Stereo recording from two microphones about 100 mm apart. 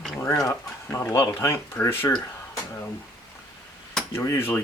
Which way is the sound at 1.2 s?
30° left (ahead or behind).